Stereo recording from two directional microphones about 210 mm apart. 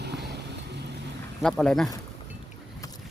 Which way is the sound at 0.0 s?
50° right (ahead or behind).